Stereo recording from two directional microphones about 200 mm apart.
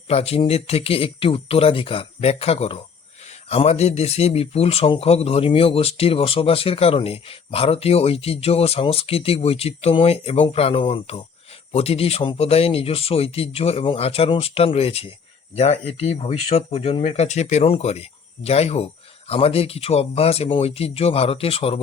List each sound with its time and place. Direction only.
0.1 s speech: 30° left (ahead or behind)